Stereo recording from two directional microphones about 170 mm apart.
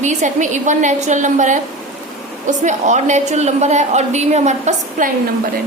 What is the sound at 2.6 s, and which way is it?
A woman's voice, 45° right (ahead or behind).